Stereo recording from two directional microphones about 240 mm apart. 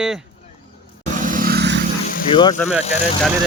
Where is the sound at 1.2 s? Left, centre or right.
Right.